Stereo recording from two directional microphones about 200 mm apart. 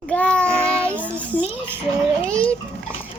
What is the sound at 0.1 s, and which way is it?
Child singing, 5° left (ahead or behind).